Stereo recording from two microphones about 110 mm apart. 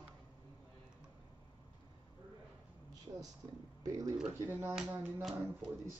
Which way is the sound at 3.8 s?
30° right (ahead or behind).